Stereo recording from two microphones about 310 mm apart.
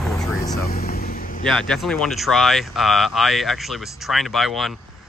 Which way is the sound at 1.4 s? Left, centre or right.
Centre.